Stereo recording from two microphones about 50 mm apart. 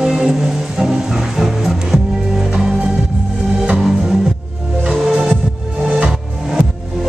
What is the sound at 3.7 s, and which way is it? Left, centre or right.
Music, centre.